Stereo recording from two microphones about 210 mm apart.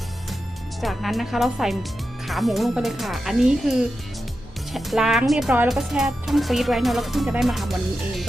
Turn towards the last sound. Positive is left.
turn(degrees=0)  # may be behind; listen again after turning